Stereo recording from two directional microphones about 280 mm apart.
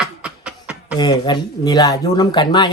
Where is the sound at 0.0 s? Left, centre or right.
Centre.